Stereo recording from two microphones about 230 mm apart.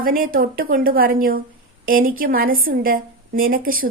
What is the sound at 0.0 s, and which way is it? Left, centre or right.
A woman's voice, right.